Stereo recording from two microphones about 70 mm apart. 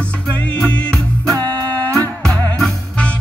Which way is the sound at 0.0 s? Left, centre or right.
Centre.